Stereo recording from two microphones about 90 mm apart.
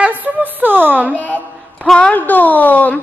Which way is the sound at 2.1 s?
20° left (ahead or behind).